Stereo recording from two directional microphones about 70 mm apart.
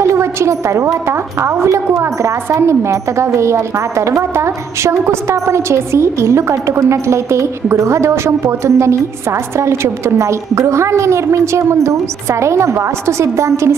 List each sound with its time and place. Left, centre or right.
0.0 s a woman's voice: right